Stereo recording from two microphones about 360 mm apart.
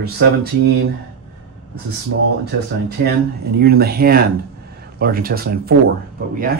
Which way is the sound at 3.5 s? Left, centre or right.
Right.